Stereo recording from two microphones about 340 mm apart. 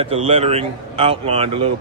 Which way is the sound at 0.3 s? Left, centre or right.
Centre.